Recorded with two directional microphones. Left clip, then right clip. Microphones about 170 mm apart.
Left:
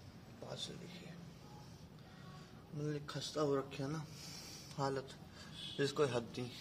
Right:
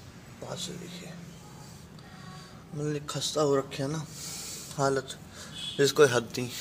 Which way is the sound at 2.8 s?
45° right (ahead or behind).